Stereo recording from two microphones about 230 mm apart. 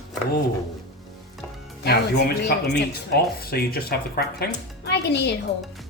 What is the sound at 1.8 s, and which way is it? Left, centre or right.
Speech, left.